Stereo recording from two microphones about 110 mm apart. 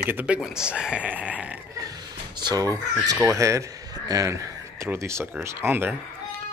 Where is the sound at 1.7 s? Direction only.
35° right (ahead or behind).